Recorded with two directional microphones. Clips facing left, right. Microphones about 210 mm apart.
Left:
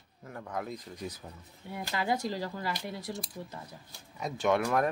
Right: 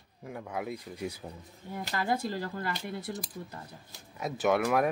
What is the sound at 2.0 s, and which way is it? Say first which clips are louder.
Speech: even; 50° right (ahead or behind).